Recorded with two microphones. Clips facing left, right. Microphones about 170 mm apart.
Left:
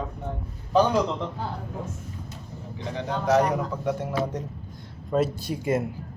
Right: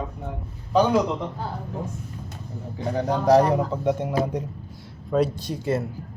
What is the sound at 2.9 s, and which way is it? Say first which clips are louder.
Speech: right 4 dB; 40° right (ahead or behind).